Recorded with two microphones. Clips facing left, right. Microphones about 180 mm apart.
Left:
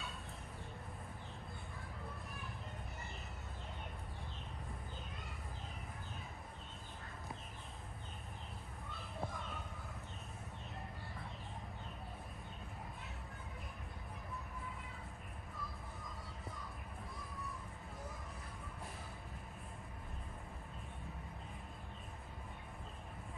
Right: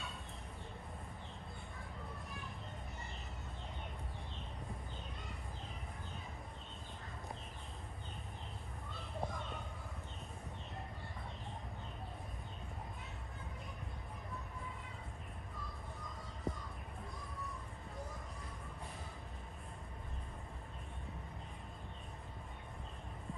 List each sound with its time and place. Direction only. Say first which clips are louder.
16.5 s music: right 11 dB; 20° right (ahead or behind)